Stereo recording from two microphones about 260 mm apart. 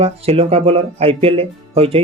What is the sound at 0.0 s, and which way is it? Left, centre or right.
Speech, right.